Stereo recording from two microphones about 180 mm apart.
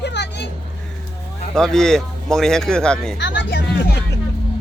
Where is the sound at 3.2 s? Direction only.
80° left.